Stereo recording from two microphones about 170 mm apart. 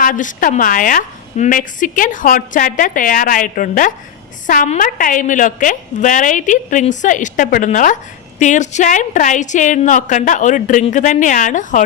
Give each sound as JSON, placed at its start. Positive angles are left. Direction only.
{"t": 0.0, "sound": "a woman's voice", "side_deg": 50}